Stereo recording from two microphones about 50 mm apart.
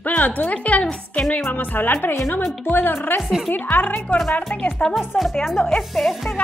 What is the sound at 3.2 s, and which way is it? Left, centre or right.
Speech, centre.